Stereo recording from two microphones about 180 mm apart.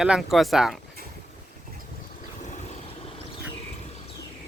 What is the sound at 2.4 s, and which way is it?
Vehicle, 40° left (ahead or behind).